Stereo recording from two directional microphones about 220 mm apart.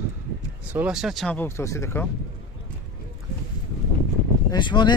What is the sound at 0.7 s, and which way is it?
Speech, 5° right (ahead or behind).